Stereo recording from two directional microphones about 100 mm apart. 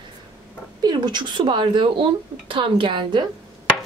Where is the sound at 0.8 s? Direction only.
45° right (ahead or behind).